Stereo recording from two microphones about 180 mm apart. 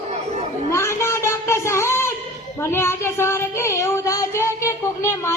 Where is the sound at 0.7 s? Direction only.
15° left (ahead or behind).